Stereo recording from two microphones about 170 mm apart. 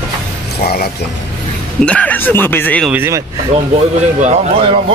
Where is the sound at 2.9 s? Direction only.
15° right (ahead or behind).